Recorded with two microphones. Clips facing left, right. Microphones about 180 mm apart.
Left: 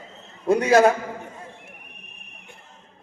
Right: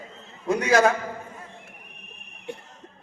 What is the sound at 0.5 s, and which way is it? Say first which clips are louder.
Speech: left 4 dB; 30° left (ahead or behind).